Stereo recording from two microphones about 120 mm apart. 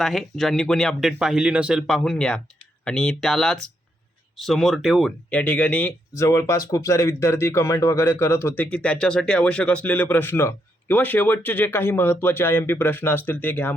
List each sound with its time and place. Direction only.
0.0 s speech: centre (ahead or behind)
2.0 s speech: 5° left (ahead or behind)
6.1 s speech: 25° left (ahead or behind)